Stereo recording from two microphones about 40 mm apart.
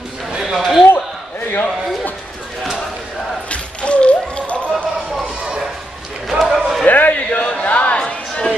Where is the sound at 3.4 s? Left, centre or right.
Left.